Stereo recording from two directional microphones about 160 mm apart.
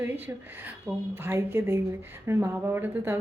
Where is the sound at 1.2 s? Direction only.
15° right (ahead or behind).